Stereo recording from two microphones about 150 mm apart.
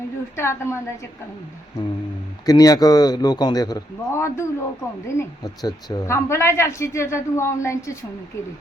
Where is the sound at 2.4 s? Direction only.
25° left (ahead or behind).